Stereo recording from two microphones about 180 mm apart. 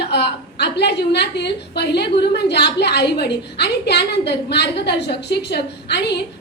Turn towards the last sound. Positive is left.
turn(degrees=65)  # may be behind; listen again after turning